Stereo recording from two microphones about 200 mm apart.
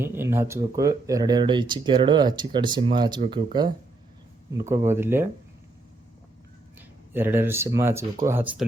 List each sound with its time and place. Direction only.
0.0 s speech: 10° right (ahead or behind)
6.7 s a sound: 10° right (ahead or behind)
7.8 s speech: 15° right (ahead or behind)